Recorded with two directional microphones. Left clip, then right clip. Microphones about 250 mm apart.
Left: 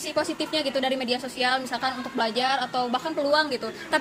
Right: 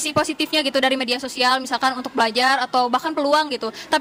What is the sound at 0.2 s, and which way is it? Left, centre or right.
A woman's voice, right.